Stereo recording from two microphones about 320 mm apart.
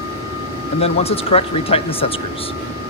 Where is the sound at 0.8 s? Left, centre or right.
Centre.